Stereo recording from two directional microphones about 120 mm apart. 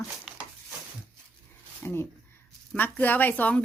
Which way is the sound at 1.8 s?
20° left (ahead or behind).